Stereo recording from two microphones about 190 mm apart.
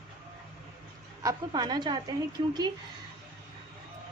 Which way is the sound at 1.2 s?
20° right (ahead or behind).